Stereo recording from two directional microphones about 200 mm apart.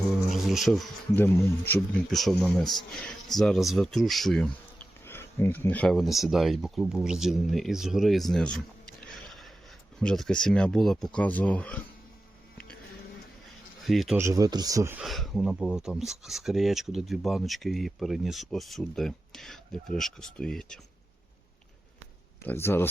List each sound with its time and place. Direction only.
0.3 s speech: centre (ahead or behind)
13.8 s speech: centre (ahead or behind)
14.2 s speech: 15° right (ahead or behind)
15.0 s speech: centre (ahead or behind)
22.4 s speech: 10° left (ahead or behind)